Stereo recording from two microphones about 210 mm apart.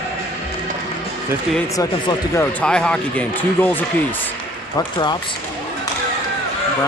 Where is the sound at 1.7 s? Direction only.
15° left (ahead or behind).